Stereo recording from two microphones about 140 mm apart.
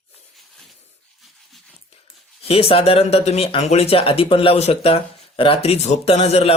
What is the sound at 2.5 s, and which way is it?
Speech, 45° left (ahead or behind).